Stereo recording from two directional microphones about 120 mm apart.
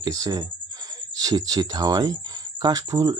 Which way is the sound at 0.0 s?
30° right (ahead or behind).